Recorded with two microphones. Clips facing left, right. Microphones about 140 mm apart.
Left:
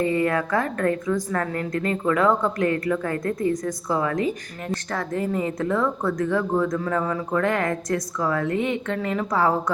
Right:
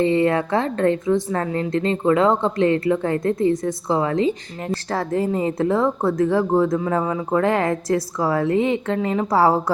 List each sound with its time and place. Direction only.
0.0 s a woman's voice: 25° right (ahead or behind)
6.7 s a woman's voice: 20° right (ahead or behind)